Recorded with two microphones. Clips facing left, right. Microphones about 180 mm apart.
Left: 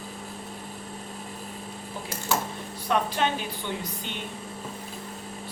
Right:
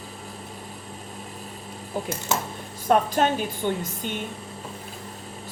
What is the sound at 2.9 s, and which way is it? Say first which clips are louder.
Speech: right 5 dB; 45° right (ahead or behind).